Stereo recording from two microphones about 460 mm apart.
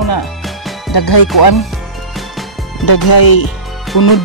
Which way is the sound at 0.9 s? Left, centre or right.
Left.